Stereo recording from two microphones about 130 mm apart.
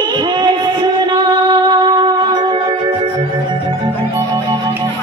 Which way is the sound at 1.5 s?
35° right (ahead or behind).